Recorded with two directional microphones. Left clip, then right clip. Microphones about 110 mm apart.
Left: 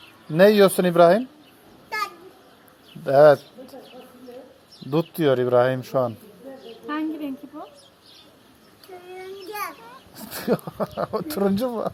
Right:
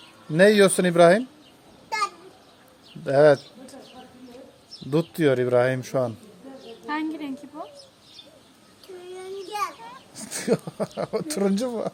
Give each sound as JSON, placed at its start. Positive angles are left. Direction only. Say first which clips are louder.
{"t": 0.3, "sound": "speech", "louder": "left 2 dB", "side_deg": -10}
{"t": 3.0, "sound": "speech", "louder": "left 3 dB", "side_deg": -10}
{"t": 4.9, "sound": "speech", "louder": "left 1 dB", "side_deg": -15}
{"t": 6.8, "sound": "a sound", "louder": "left 1 dB", "side_deg": -20}
{"t": 10.2, "sound": "speech", "louder": "even", "side_deg": -15}